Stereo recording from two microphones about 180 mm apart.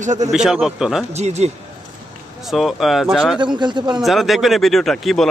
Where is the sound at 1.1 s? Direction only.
40° right (ahead or behind).